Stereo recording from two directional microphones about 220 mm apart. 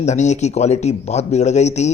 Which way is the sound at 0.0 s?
30° left (ahead or behind).